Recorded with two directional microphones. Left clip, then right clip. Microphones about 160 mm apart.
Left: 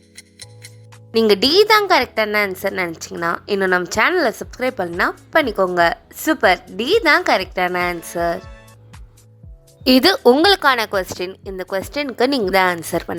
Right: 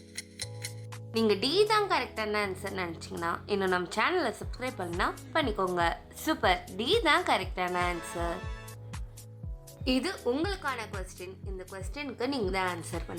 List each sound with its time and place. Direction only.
0.2 s music: 5° right (ahead or behind)
1.3 s a woman's voice: 50° left (ahead or behind)
4.5 s a woman's voice: 45° left (ahead or behind)
9.8 s a woman's voice: 55° left (ahead or behind)